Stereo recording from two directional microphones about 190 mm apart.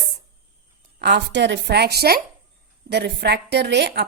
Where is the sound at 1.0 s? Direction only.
65° right (ahead or behind).